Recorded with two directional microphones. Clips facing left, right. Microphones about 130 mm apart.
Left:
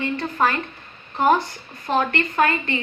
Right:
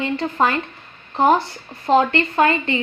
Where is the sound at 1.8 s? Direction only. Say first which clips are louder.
Right 5 dB; 25° right (ahead or behind).